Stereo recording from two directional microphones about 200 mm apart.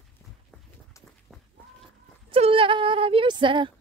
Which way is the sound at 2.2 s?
30° right (ahead or behind).